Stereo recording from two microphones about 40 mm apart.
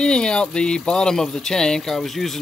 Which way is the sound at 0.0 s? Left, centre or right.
Left.